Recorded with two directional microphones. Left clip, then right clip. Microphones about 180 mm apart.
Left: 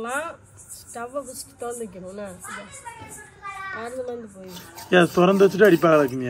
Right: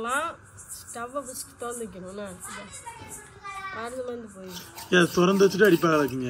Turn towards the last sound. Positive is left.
turn(degrees=0)  # may be behind; listen again after turning